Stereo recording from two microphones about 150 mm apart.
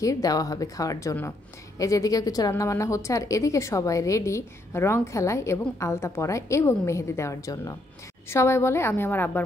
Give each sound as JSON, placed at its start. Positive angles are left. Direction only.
{"t": 0.0, "sound": "a woman's voice", "side_deg": 25}